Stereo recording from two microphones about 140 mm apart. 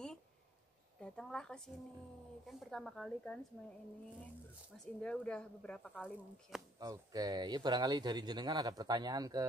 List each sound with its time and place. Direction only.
1.0 s a woman's voice: 5° left (ahead or behind)
5.0 s speech: 5° left (ahead or behind)
6.8 s speech: 25° right (ahead or behind)